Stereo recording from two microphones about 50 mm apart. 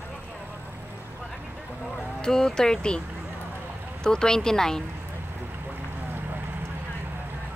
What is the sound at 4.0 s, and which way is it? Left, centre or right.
Speech, centre.